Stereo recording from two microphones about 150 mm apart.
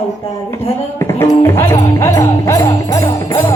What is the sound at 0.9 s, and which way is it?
Music, 15° left (ahead or behind).